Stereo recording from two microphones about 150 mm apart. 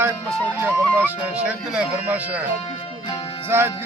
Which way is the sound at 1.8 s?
10° right (ahead or behind).